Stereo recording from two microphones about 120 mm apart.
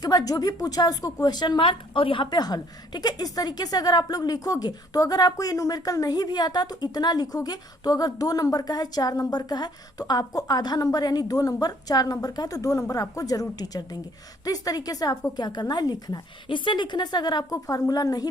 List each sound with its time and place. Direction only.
0.0 s a woman's voice: 30° left (ahead or behind)